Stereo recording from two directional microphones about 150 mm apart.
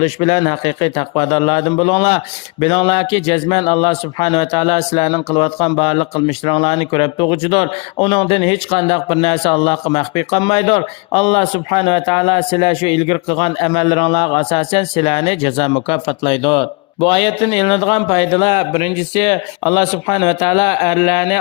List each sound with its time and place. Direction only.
0.0 s speech: 40° left (ahead or behind)